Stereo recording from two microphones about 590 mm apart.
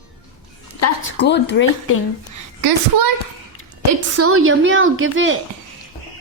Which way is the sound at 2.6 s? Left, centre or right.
Right.